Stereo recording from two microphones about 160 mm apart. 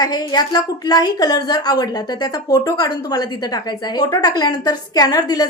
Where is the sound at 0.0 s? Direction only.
25° left (ahead or behind).